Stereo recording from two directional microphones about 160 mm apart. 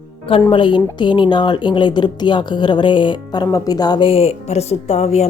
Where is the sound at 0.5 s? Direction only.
30° left (ahead or behind).